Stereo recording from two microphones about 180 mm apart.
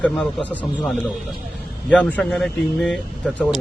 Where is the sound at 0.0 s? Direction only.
5° left (ahead or behind).